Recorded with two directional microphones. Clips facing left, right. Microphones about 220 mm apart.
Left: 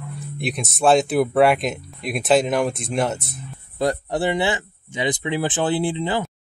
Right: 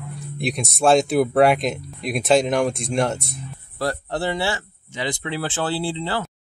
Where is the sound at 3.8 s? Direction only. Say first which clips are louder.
Left 3 dB; 15° left (ahead or behind).